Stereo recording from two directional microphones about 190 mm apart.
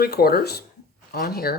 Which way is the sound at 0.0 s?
55° left (ahead or behind).